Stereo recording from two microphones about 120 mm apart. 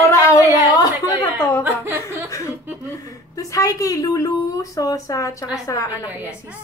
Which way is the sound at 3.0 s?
30° left (ahead or behind).